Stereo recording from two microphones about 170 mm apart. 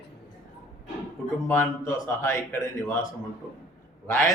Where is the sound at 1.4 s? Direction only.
15° left (ahead or behind).